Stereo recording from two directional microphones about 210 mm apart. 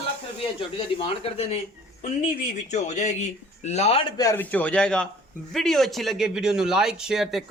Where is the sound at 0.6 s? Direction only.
25° left (ahead or behind).